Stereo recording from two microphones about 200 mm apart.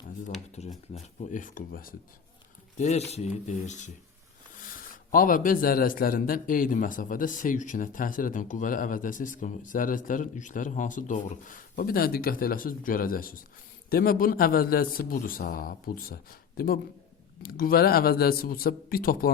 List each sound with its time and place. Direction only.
0.6 s speech: 35° left (ahead or behind)